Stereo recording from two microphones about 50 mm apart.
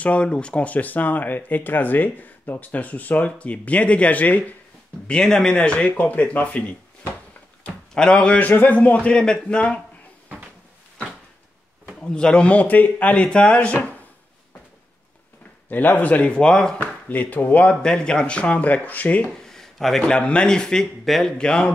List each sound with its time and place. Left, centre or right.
0.0 s speech: left
5.0 s speech: centre
7.9 s speech: centre
8.4 s speech: left
9.1 s speech: centre
12.0 s speech: centre
15.7 s speech: left
16.3 s speech: centre
16.8 s speech: left
17.8 s speech: centre; by 19.2 s left
19.4 s a sound: centre
20.0 s speech: left
21.4 s speech: centre